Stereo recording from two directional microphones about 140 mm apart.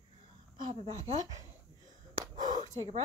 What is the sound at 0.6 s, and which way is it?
Speech, 35° right (ahead or behind).